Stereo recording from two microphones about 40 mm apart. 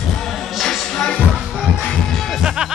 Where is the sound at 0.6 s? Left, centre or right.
Centre.